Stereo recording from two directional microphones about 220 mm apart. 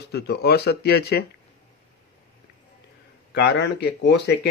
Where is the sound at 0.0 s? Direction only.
50° left (ahead or behind).